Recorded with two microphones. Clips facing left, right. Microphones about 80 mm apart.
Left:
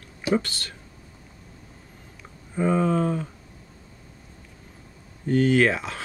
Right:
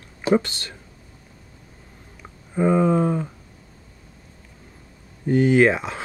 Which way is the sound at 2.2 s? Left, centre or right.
Centre.